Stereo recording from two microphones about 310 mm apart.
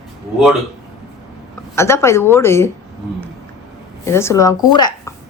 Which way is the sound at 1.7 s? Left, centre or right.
Centre.